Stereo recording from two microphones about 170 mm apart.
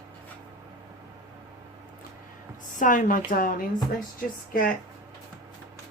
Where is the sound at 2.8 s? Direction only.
50° left (ahead or behind).